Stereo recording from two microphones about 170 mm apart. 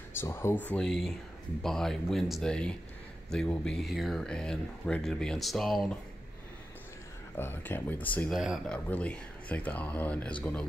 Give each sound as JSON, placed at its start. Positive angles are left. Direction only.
{"t": 0.2, "sound": "speech", "side_deg": 15}
{"t": 7.3, "sound": "speech", "side_deg": 15}
{"t": 8.3, "sound": "speech", "side_deg": 0}